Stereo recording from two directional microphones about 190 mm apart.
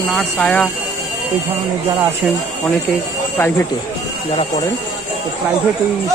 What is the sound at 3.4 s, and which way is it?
Speech, 10° left (ahead or behind).